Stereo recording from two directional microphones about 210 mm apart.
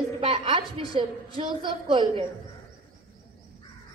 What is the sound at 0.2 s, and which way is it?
A woman's voice, 25° right (ahead or behind).